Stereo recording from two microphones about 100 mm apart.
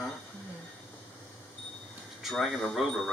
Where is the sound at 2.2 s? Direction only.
Centre (ahead or behind).